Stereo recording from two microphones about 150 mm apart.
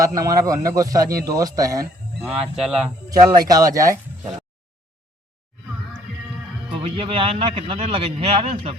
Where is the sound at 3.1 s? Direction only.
25° right (ahead or behind).